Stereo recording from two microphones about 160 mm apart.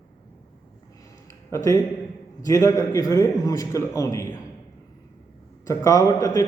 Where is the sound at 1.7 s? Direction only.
20° left (ahead or behind).